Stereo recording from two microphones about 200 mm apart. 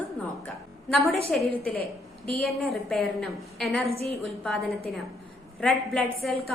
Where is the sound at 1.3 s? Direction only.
Centre (ahead or behind).